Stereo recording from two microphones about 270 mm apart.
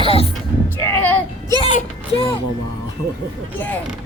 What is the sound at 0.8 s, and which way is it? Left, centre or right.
Speech, centre.